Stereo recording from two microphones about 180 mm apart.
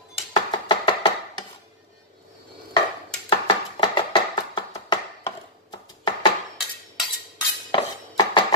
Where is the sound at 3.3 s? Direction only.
25° left (ahead or behind).